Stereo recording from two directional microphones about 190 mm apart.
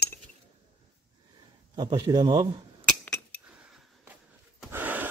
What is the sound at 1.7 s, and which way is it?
Speech, 25° right (ahead or behind).